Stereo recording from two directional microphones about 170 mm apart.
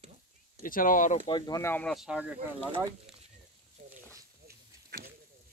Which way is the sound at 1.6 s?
10° left (ahead or behind).